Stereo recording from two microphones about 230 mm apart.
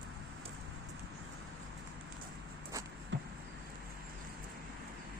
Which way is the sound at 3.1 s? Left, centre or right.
Right.